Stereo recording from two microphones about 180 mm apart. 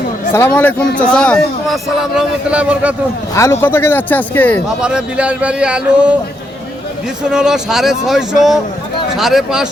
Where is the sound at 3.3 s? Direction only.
15° left (ahead or behind).